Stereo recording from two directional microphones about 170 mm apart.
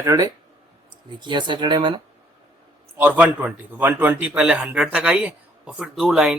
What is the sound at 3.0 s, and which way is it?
A man's voice, 10° right (ahead or behind).